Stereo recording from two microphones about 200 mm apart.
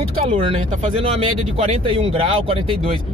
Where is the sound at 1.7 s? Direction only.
30° right (ahead or behind).